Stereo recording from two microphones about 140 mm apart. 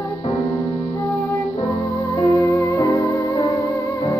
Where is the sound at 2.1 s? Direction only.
20° left (ahead or behind).